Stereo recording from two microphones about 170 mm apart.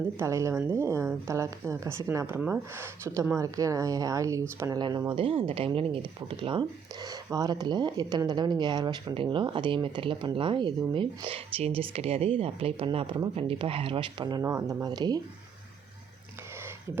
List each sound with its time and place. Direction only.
0.2 s a woman's voice: 15° right (ahead or behind)